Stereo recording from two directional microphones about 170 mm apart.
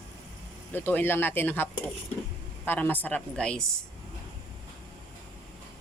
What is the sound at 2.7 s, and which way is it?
Speech, 10° left (ahead or behind).